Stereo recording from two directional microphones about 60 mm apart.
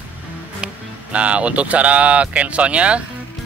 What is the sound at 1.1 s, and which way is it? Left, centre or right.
Speech, right.